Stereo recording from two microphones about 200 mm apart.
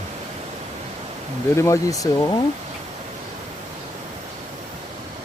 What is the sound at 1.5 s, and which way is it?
Speech, 15° left (ahead or behind).